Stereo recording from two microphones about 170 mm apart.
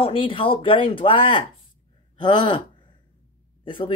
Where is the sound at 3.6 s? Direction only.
30° left (ahead or behind).